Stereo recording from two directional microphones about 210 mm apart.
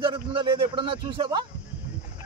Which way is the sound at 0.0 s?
20° right (ahead or behind).